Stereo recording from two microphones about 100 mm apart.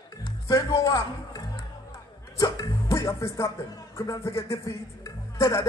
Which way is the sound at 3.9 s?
25° left (ahead or behind).